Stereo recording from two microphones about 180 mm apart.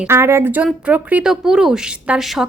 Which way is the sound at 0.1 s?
15° right (ahead or behind).